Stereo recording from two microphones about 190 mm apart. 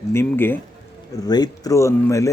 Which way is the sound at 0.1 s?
10° left (ahead or behind).